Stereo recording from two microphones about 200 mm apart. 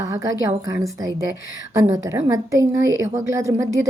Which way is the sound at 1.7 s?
15° right (ahead or behind).